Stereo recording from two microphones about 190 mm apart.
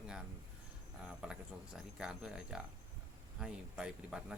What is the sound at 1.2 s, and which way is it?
Speech, 5° right (ahead or behind).